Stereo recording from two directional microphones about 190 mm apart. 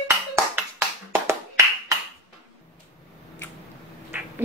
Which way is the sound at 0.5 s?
10° right (ahead or behind).